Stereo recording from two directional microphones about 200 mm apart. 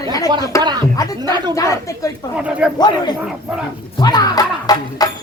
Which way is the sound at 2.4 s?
5° right (ahead or behind).